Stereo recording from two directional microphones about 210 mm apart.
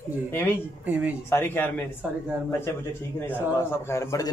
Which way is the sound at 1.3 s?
10° left (ahead or behind).